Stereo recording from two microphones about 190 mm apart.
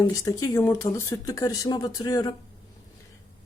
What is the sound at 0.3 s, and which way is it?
A woman's voice, 15° left (ahead or behind).